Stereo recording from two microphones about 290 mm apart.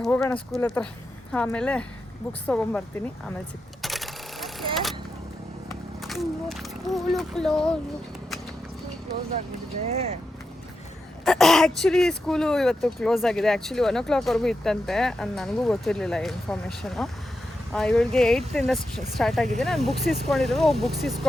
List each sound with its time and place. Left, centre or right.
0.0 s speech: centre
3.8 s a sound: centre
6.0 s speech: centre
9.8 s speech: right
11.3 s speech: centre